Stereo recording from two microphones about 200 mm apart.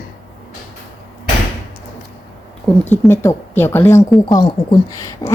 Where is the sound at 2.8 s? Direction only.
10° left (ahead or behind).